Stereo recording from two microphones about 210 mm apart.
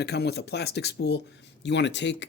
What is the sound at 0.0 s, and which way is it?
Speech, 50° left (ahead or behind).